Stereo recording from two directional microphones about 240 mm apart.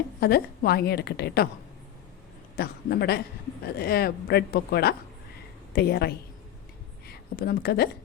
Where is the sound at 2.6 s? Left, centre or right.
Left.